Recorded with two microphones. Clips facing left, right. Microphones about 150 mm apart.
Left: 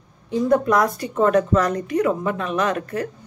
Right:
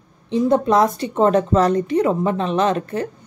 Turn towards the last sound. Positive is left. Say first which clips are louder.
# right 3 dB
turn(degrees=-25)  # may be behind; listen again after turning